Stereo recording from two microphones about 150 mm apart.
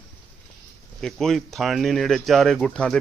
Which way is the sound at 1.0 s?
5° left (ahead or behind).